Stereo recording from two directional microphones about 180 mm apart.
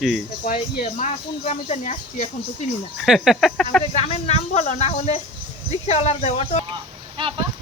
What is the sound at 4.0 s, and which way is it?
Speech, 35° left (ahead or behind).